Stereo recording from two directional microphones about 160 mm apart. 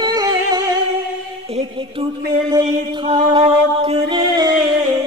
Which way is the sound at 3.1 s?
35° right (ahead or behind).